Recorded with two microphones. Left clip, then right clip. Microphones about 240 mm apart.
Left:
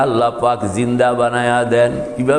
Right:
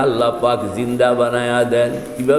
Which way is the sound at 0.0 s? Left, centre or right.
Left.